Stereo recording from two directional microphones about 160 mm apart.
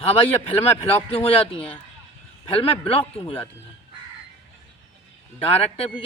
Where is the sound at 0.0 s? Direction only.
40° left (ahead or behind).